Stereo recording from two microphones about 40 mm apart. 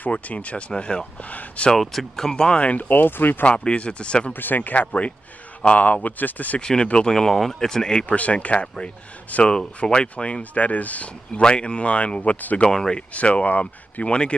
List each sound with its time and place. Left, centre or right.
0.1 s speech: left
1.8 s speech: centre
2.5 s speech: left
3.4 s speech: left
4.3 s speech: left
5.6 s speech: left
6.6 s speech: left
8.1 s speech: left
11.4 s speech: left
12.6 s speech: centre
13.1 s speech: left
14.0 s speech: left